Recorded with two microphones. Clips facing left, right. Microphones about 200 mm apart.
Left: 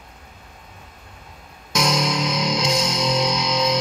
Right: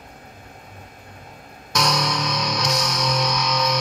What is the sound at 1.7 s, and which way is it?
Music, 25° left (ahead or behind).